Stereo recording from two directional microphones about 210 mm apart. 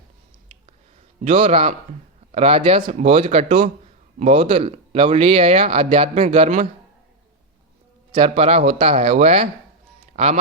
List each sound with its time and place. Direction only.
1.2 s speech: 30° right (ahead or behind)
8.1 s speech: 25° right (ahead or behind)